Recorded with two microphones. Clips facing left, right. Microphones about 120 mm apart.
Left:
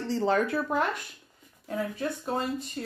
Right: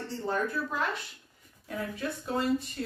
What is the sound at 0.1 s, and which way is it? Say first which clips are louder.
Speech: left 6 dB; 90° left.